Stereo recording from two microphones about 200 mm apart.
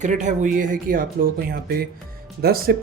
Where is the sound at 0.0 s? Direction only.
35° right (ahead or behind).